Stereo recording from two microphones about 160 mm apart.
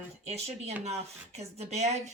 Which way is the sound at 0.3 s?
40° right (ahead or behind).